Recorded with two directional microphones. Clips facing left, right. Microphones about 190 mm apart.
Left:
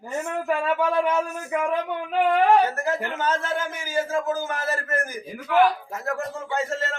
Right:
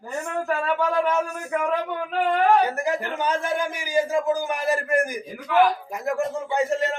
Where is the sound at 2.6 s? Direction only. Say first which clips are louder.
Right 1 dB; 15° right (ahead or behind).